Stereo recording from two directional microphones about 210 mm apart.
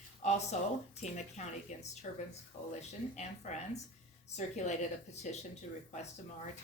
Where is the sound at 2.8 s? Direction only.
35° left (ahead or behind).